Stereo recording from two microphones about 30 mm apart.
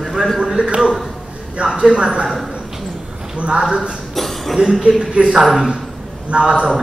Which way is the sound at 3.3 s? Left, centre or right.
Right.